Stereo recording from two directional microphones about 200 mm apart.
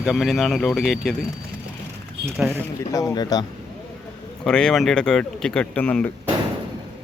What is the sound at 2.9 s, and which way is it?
Speech, 15° left (ahead or behind).